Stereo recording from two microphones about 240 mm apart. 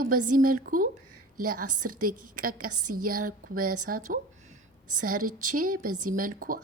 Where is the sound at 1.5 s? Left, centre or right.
Right.